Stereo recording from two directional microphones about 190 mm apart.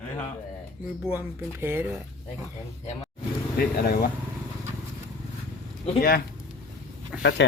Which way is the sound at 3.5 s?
50° left (ahead or behind).